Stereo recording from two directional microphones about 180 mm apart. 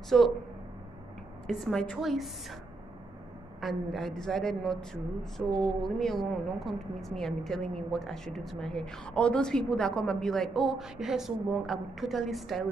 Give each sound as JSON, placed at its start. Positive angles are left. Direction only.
{"t": 0.1, "sound": "a woman's voice", "side_deg": 0}
{"t": 1.5, "sound": "a woman's voice", "side_deg": 0}
{"t": 3.6, "sound": "a woman's voice", "side_deg": 0}